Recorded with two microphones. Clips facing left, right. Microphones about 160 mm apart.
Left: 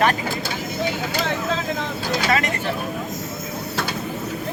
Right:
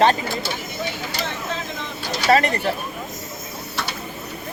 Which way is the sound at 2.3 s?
35° right (ahead or behind).